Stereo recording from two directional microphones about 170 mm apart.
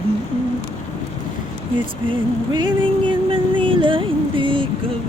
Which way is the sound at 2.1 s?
30° right (ahead or behind).